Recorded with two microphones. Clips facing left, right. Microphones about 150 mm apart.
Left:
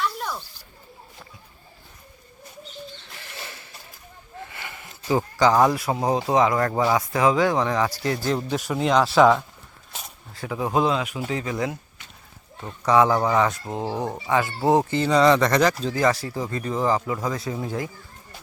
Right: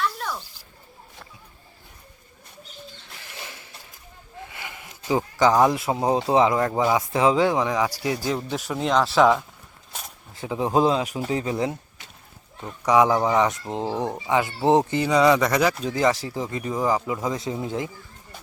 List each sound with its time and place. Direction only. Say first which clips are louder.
0.0 s a sound: even; 15° left (ahead or behind)
3.2 s a sound: left 1 dB; 15° right (ahead or behind)
5.8 s speech: right 1 dB; 25° right (ahead or behind)
7.5 s speech: even; 10° right (ahead or behind)
8.4 s speech: left 2 dB; 5° left (ahead or behind)
10.3 s speech: right 2 dB; 20° right (ahead or behind)
12.8 s speech: even; 15° right (ahead or behind)